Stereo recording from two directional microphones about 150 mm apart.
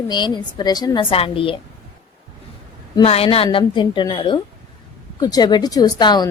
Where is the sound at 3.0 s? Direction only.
40° left (ahead or behind).